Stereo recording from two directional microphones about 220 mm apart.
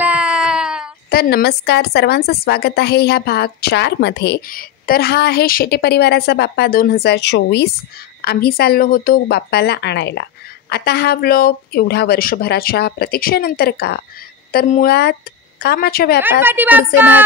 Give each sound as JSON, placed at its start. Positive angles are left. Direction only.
{"t": 0.0, "sound": "a sound", "side_deg": -5}
{"t": 1.1, "sound": "a woman's voice", "side_deg": 45}
{"t": 16.4, "sound": "speech", "side_deg": -10}